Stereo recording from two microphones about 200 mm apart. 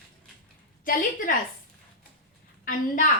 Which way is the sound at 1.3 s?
45° left (ahead or behind).